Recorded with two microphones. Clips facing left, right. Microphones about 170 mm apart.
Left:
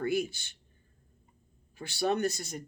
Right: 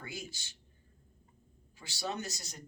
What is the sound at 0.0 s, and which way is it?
Speech, 60° left (ahead or behind).